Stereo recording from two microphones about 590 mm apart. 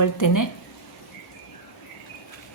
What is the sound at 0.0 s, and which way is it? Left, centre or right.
Speech, left.